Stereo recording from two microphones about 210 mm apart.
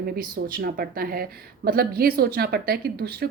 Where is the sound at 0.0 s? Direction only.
45° right (ahead or behind).